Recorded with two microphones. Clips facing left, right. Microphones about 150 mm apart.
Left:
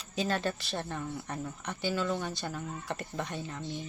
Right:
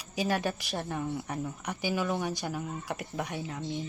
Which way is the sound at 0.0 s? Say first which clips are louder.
Right 1 dB; 10° right (ahead or behind).